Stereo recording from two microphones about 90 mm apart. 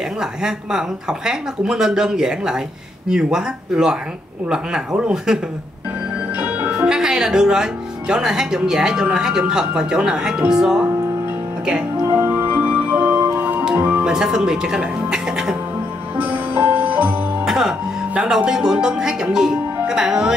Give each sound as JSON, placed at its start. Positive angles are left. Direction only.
{"t": 0.2, "sound": "speech", "side_deg": -5}
{"t": 6.3, "sound": "speech", "side_deg": -15}
{"t": 12.1, "sound": "music", "side_deg": -25}
{"t": 14.0, "sound": "speech", "side_deg": -5}
{"t": 16.2, "sound": "music", "side_deg": -20}
{"t": 17.5, "sound": "music", "side_deg": -5}
{"t": 19.9, "sound": "speech", "side_deg": -5}